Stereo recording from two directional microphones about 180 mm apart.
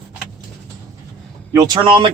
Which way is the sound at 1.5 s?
25° right (ahead or behind).